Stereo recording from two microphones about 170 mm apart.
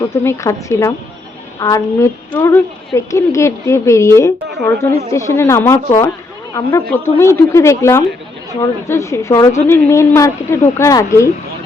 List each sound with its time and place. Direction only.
0.0 s a woman's voice: 20° left (ahead or behind)